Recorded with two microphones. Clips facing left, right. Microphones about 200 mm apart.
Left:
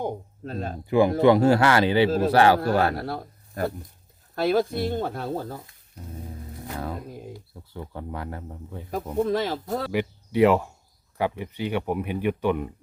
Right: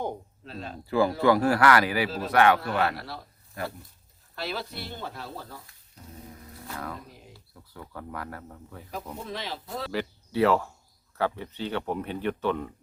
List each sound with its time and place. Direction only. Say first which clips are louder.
0.4 s speech: left 7 dB; 45° left (ahead or behind)
0.9 s speech: left 4 dB; 20° left (ahead or behind)
2.6 s a man's voice: left 5 dB; 45° left (ahead or behind)
6.5 s a sound: left 5 dB; 20° left (ahead or behind)
7.1 s a sound: left 12 dB; 50° left (ahead or behind)
7.3 s speech: left 7 dB; 25° left (ahead or behind)
9.1 s speech: left 16 dB; 50° left (ahead or behind)
9.9 s speech: left 4 dB; 15° left (ahead or behind)